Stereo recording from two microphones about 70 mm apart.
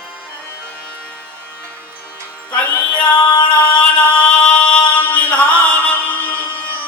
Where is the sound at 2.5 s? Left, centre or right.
Left.